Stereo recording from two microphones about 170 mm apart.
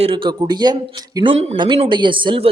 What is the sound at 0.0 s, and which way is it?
Speech, 30° right (ahead or behind).